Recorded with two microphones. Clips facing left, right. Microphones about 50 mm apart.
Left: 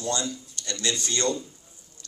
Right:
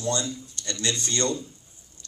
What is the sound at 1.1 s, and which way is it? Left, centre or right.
Speech, left.